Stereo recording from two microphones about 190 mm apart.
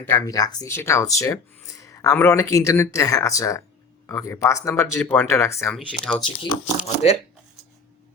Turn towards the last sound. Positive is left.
turn(degrees=35)  # may be behind; listen again after turning